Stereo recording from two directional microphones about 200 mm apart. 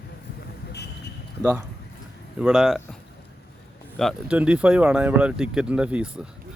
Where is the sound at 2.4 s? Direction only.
5° right (ahead or behind).